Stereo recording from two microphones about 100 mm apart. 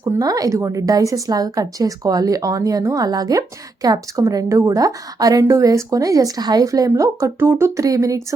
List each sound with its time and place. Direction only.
0.2 s a woman's voice: 35° right (ahead or behind)